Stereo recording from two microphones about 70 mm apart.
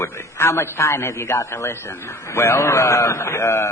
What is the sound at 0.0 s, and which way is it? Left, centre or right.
A man's voice, left.